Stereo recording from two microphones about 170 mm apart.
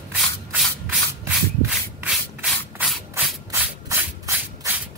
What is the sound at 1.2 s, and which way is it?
Rub, 15° right (ahead or behind).